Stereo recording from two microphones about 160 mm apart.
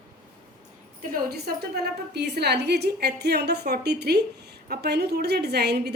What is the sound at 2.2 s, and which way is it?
A woman's voice, 90° right.